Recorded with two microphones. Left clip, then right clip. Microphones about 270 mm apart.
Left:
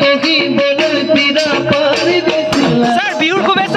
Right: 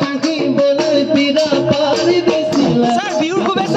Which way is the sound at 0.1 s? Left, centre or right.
Right.